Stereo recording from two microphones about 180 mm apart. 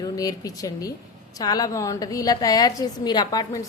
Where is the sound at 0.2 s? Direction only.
20° left (ahead or behind).